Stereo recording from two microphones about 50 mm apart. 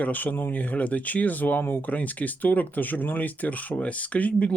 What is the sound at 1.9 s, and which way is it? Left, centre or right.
Speech, left.